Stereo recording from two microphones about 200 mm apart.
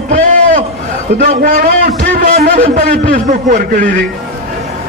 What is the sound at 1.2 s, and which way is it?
A man's voice, 40° right (ahead or behind).